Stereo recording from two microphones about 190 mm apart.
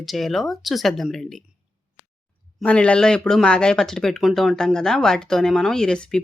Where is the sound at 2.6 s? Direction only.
5° left (ahead or behind).